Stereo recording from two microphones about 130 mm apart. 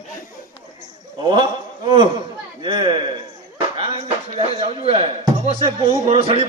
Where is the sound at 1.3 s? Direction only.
35° right (ahead or behind).